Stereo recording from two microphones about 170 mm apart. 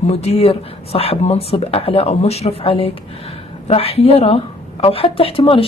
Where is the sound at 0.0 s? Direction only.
40° left (ahead or behind).